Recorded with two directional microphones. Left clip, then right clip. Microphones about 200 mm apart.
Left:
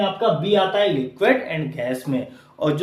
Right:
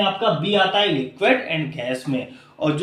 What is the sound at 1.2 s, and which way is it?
Speech, 20° left (ahead or behind).